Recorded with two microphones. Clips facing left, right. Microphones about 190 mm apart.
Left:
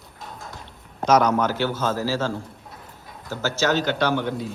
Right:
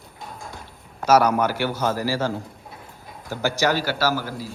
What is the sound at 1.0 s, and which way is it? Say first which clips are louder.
A man's voice: right 1 dB; 10° right (ahead or behind).